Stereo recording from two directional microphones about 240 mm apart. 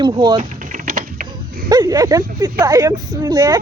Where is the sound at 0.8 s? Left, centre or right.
Right.